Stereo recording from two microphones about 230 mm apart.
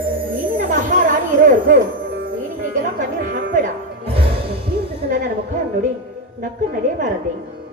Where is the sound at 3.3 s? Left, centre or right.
Right.